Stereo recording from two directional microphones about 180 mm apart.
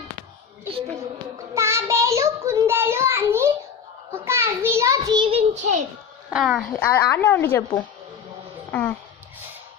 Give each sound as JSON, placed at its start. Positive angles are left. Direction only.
{"t": 1.5, "sound": "child singing", "side_deg": -15}
{"t": 4.1, "sound": "a sound", "side_deg": -15}
{"t": 6.3, "sound": "a child's voice", "side_deg": 0}
{"t": 8.7, "sound": "speech", "side_deg": 10}